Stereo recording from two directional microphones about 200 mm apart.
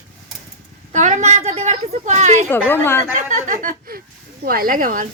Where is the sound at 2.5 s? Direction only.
10° left (ahead or behind).